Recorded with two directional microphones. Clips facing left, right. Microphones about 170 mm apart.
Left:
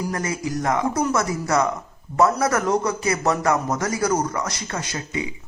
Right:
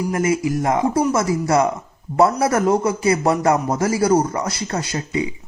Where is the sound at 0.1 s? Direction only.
25° right (ahead or behind).